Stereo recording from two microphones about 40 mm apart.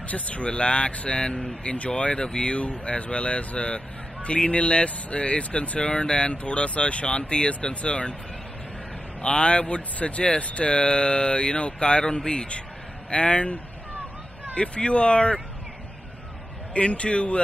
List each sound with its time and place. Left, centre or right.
0.1 s a man's voice: left
9.2 s speech: left
16.7 s a man's voice: left